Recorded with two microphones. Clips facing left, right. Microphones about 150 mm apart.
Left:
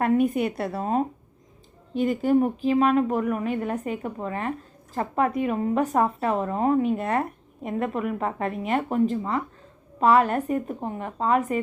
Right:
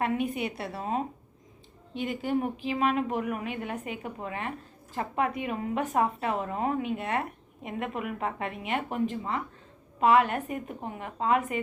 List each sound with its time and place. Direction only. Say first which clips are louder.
0.0 s a woman's voice: left 7 dB; 45° left (ahead or behind)